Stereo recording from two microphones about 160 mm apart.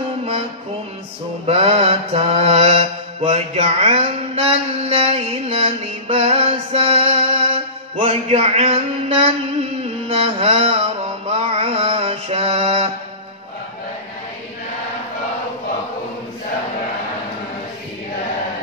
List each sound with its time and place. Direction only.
1.5 s mantra: 35° right (ahead or behind)
7.9 s music: 40° right (ahead or behind)
11.2 s mantra: 40° right (ahead or behind)